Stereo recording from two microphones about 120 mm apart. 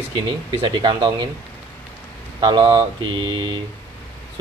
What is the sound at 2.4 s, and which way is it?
Speech, 40° right (ahead or behind).